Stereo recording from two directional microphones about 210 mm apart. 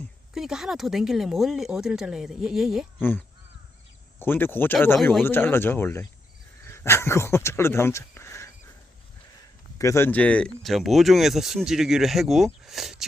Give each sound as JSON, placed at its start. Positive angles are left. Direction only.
{"t": 0.3, "sound": "speech", "side_deg": 0}
{"t": 3.0, "sound": "speech", "side_deg": 10}
{"t": 5.2, "sound": "speech", "side_deg": 10}
{"t": 9.7, "sound": "speech", "side_deg": 15}